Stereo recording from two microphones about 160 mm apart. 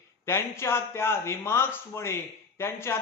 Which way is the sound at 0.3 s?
15° left (ahead or behind).